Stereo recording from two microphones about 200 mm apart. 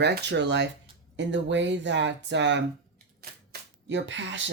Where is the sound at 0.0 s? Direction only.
60° right (ahead or behind).